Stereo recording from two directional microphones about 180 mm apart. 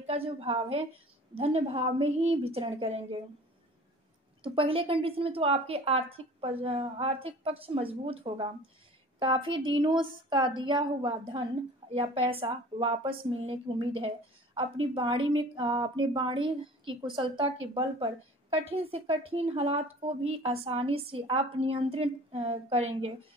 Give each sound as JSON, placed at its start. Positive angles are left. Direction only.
{"t": 0.0, "sound": "a woman's voice", "side_deg": -35}
{"t": 4.4, "sound": "a woman's voice", "side_deg": -30}